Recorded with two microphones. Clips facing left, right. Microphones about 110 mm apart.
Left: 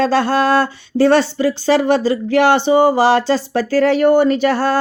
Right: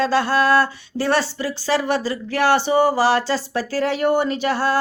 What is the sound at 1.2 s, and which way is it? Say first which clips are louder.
Speech: left 8 dB; 60° left (ahead or behind).